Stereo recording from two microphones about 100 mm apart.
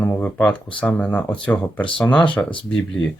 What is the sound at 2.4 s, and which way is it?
Speech, 20° left (ahead or behind).